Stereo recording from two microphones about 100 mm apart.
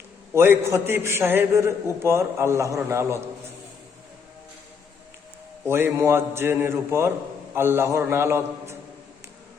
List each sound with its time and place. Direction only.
0.3 s a man's voice: 25° right (ahead or behind)
5.6 s a man's voice: 25° right (ahead or behind)